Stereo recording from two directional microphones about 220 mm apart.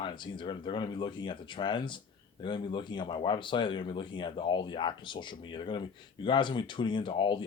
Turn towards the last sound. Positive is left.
turn(degrees=20)  # may be behind; listen again after turning